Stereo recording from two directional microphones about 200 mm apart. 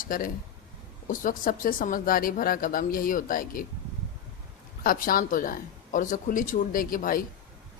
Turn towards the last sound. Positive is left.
turn(degrees=45)  # may be behind; listen again after turning